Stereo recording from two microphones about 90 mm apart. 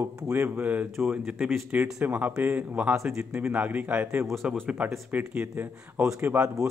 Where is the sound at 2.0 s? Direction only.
15° right (ahead or behind).